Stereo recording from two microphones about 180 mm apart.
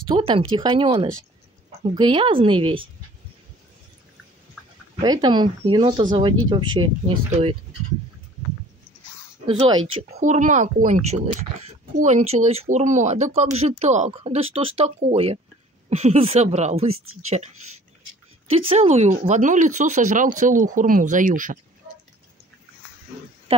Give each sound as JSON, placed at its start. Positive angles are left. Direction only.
{"t": 0.1, "sound": "speech", "side_deg": -30}
{"t": 5.0, "sound": "speech", "side_deg": -25}
{"t": 9.5, "sound": "speech", "side_deg": -30}
{"t": 10.1, "sound": "speech", "side_deg": -40}
{"t": 18.5, "sound": "speech", "side_deg": -35}